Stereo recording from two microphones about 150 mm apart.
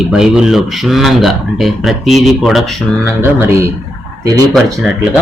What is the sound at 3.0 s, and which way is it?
Speech, 20° right (ahead or behind).